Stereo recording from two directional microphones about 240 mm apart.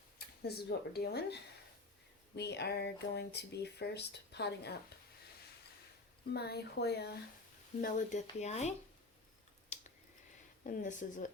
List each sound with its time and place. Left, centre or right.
0.2 s speech: left
6.3 s speech: left
10.6 s speech: left